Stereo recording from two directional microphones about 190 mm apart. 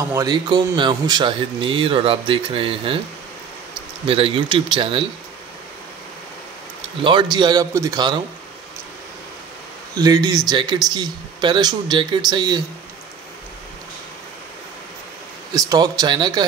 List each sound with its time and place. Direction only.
0.1 s speech: 20° right (ahead or behind)
4.1 s speech: 30° right (ahead or behind)
7.0 s speech: 25° right (ahead or behind)
9.9 s speech: 20° right (ahead or behind)
15.5 s speech: 20° right (ahead or behind)